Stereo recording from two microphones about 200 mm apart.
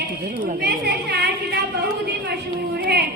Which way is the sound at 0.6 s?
55° right (ahead or behind).